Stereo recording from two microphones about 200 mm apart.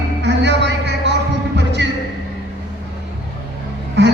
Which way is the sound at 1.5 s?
60° right (ahead or behind).